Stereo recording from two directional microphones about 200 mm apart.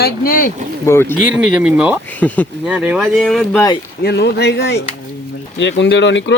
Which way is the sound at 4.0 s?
55° left (ahead or behind).